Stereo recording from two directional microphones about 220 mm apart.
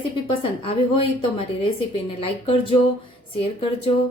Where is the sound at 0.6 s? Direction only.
25° left (ahead or behind).